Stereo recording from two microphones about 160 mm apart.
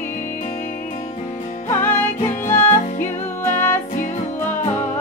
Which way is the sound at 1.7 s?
15° left (ahead or behind).